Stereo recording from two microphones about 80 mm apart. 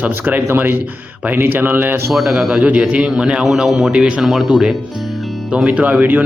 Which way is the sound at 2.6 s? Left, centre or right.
Centre.